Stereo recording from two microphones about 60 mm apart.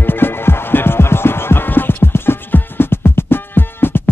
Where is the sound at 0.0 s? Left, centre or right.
Left.